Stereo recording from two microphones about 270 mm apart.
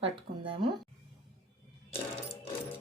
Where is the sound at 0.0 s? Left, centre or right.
Centre.